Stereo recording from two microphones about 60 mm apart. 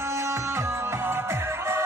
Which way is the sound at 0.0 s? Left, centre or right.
Right.